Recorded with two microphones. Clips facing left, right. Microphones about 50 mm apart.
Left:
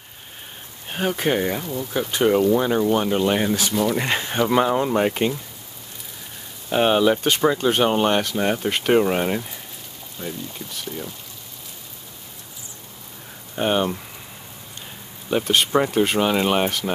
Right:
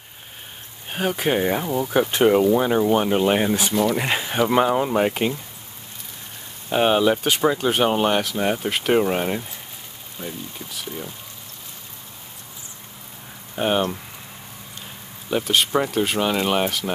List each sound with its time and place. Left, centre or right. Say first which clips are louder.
0.8 s speech: even; centre
1.5 s speech: right 4 dB; right
1.9 s speech: right 3 dB; right
2.2 s speech: even; centre
6.7 s speech: even; centre
13.6 s speech: even; centre
15.2 s speech: left 1 dB; centre